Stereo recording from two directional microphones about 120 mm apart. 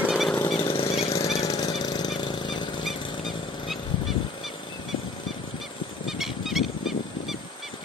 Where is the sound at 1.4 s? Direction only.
35° left (ahead or behind).